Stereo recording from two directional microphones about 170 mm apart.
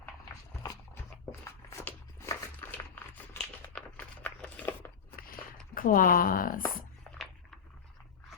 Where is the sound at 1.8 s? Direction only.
15° left (ahead or behind).